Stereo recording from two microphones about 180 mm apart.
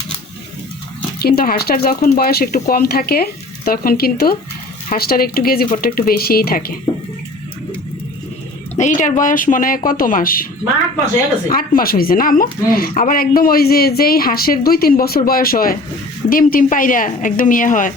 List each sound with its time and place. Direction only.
1.2 s speech: 60° left (ahead or behind)
8.8 s speech: 45° left (ahead or behind)
11.4 s speech: 50° left (ahead or behind)